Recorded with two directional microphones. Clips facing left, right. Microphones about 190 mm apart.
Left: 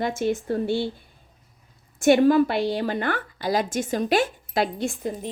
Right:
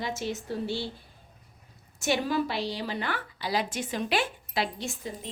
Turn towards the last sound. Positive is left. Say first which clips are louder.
# left 8 dB
turn(degrees=50)  # may be behind; listen again after turning